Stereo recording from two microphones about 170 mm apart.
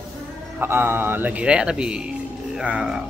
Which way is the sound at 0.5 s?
15° right (ahead or behind).